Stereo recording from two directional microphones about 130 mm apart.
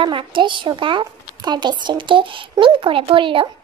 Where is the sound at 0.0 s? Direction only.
40° right (ahead or behind).